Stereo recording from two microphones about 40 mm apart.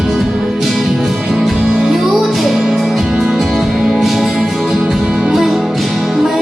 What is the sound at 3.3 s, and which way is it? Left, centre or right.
Music, centre.